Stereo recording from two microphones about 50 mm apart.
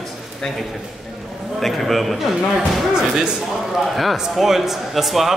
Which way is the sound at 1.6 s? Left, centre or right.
Centre.